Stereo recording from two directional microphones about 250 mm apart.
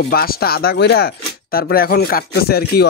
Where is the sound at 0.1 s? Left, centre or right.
Left.